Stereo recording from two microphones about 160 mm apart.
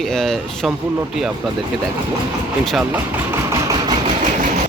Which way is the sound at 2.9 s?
20° right (ahead or behind).